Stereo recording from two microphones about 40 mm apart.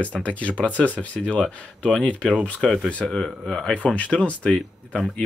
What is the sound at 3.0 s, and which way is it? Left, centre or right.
Speech, centre.